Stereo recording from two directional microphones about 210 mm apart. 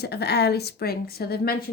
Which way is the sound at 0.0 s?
50° left (ahead or behind).